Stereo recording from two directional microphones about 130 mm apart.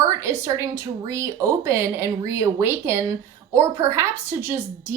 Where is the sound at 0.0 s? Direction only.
20° right (ahead or behind).